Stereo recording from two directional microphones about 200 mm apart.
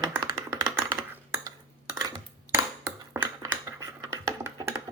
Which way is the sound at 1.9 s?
20° right (ahead or behind).